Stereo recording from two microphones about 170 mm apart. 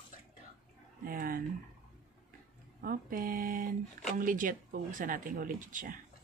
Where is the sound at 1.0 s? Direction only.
55° right (ahead or behind).